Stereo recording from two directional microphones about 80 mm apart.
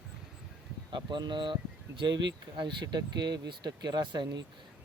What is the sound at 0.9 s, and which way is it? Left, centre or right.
Speech, right.